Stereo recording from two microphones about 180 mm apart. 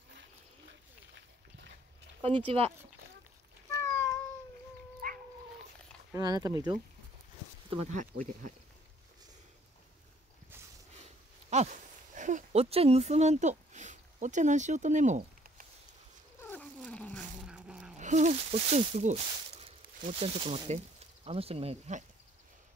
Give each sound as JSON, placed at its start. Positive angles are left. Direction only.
{"t": 2.2, "sound": "speech", "side_deg": -30}
{"t": 5.0, "sound": "dog", "side_deg": -55}
{"t": 6.1, "sound": "speech", "side_deg": -20}
{"t": 7.7, "sound": "speech", "side_deg": -40}
{"t": 11.5, "sound": "speech", "side_deg": -40}
{"t": 16.4, "sound": "cat", "side_deg": 10}
{"t": 17.5, "sound": "a sound", "side_deg": -5}
{"t": 17.9, "sound": "speech", "side_deg": -40}